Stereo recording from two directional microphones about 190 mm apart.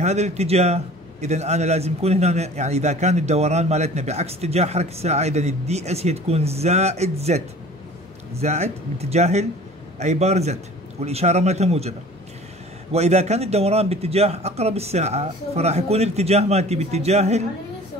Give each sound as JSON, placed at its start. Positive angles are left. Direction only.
{"t": 0.0, "sound": "a man's voice", "side_deg": -35}
{"t": 12.9, "sound": "a man's voice", "side_deg": -35}